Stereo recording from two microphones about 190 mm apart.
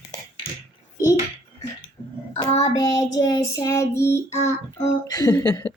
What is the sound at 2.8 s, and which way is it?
Child singing, 15° left (ahead or behind).